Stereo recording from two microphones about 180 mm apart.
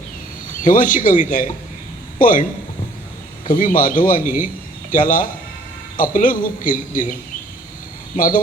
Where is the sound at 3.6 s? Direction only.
45° left (ahead or behind).